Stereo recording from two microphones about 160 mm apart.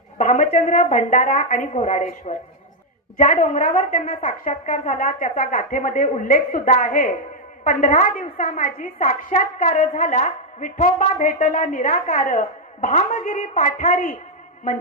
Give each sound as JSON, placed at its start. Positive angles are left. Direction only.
{"t": 0.2, "sound": "a woman's voice", "side_deg": 55}